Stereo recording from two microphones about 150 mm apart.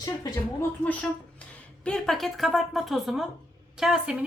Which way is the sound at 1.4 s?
5° left (ahead or behind).